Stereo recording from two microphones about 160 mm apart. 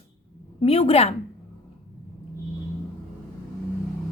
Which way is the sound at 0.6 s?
35° left (ahead or behind).